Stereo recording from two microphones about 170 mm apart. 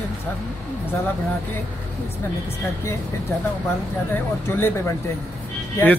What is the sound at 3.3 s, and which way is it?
A man's voice, 15° left (ahead or behind).